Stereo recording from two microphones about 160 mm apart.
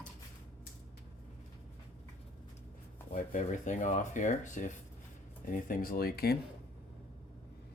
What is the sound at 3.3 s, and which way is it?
Speech, 50° left (ahead or behind).